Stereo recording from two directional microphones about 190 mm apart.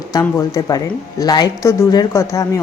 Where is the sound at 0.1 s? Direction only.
20° left (ahead or behind).